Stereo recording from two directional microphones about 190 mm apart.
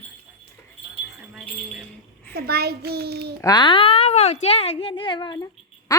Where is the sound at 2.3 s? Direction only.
55° right (ahead or behind).